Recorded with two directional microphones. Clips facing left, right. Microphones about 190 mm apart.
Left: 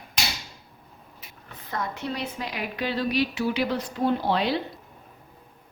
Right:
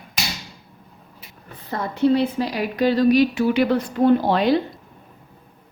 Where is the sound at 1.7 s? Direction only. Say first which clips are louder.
Right 12 dB; 30° right (ahead or behind); by 4.5 s 50° right (ahead or behind).